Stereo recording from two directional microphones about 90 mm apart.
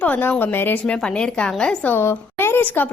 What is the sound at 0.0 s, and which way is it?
Speech, 20° left (ahead or behind).